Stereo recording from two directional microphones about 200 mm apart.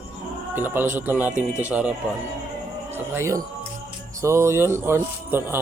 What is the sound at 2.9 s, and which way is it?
Speech, 15° right (ahead or behind).